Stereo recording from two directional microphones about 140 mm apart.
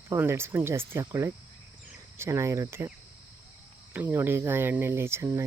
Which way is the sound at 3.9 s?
15° right (ahead or behind).